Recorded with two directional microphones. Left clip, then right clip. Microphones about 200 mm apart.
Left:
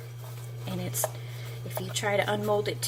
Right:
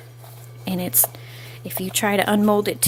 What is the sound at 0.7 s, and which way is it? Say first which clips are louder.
Speech: right 10 dB; 50° right (ahead or behind).